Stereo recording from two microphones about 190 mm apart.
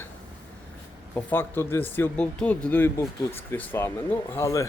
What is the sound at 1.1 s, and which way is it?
Speech, 10° left (ahead or behind).